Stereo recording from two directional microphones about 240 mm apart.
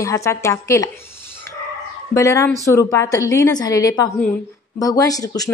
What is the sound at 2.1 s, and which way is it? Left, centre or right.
A woman's voice, centre.